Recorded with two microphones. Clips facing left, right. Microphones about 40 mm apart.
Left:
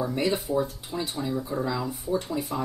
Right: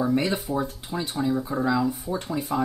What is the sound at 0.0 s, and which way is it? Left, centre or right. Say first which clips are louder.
Speech: right 3 dB; centre.